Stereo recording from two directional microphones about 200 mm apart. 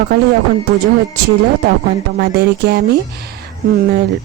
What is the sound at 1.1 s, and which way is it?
Speech, 55° right (ahead or behind).